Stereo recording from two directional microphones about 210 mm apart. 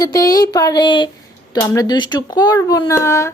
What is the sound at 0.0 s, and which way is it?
Speech, 15° left (ahead or behind).